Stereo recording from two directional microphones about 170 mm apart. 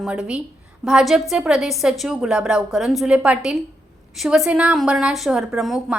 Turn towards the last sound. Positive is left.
turn(degrees=0)  # may be behind; listen again after turning